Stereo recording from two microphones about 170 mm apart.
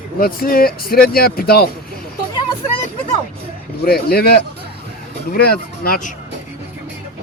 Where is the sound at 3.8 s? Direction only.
65° left (ahead or behind).